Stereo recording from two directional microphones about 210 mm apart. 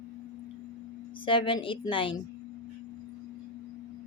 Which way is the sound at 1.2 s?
25° left (ahead or behind).